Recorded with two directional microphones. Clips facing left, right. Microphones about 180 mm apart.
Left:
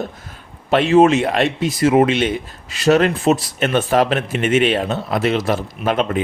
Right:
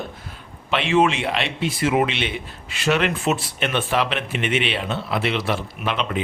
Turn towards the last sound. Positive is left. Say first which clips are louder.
# left 6 dB
turn(degrees=45)  # may be behind; listen again after turning